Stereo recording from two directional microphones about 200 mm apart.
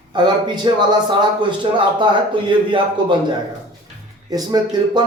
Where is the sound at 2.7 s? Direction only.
25° right (ahead or behind).